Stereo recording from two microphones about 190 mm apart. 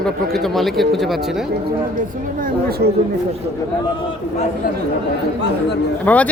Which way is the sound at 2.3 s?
50° right (ahead or behind).